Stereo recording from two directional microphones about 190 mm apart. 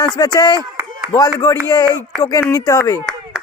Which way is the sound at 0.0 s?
20° left (ahead or behind).